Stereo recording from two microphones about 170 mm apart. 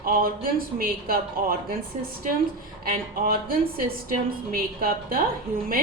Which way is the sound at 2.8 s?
60° right (ahead or behind).